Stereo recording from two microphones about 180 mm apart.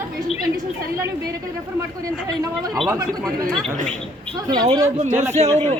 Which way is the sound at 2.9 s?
20° right (ahead or behind).